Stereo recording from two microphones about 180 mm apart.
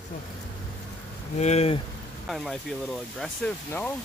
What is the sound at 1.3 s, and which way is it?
Speech, 35° left (ahead or behind).